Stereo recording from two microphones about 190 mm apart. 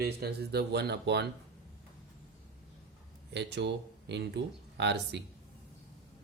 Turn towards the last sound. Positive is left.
turn(degrees=-65)  # may be behind; listen again after turning